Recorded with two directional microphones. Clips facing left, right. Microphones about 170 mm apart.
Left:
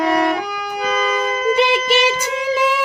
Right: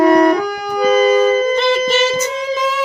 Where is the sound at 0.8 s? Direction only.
35° right (ahead or behind).